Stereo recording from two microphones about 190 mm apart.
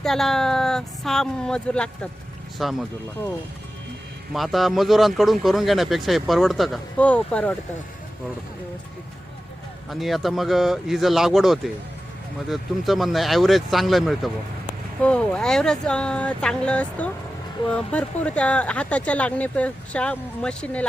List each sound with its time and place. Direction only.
0.0 s speech: centre (ahead or behind)
4.3 s speech: centre (ahead or behind)
9.9 s speech: centre (ahead or behind)